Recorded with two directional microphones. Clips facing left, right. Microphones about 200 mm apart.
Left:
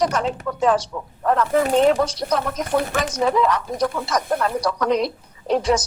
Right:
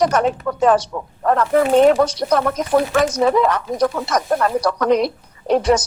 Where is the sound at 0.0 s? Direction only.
60° right (ahead or behind).